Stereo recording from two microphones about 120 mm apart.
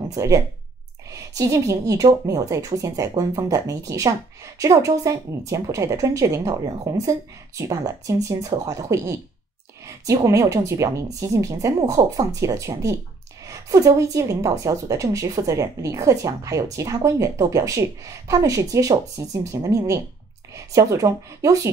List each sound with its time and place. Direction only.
0.1 s a woman's voice: 30° right (ahead or behind)